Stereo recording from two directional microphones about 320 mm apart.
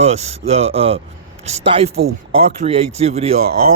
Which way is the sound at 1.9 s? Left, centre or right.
Right.